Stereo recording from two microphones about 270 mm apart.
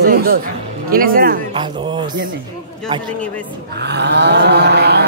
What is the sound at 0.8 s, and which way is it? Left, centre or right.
Speech, right.